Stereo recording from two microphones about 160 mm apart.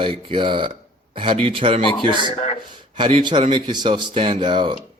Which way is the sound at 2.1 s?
30° left (ahead or behind).